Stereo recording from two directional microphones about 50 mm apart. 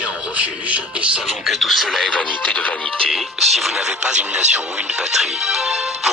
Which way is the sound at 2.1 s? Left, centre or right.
Left.